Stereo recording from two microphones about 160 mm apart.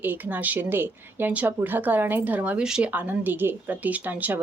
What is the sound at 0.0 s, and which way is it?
Speech, 10° right (ahead or behind).